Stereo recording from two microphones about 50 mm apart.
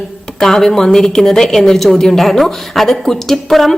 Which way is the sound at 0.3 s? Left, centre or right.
Centre.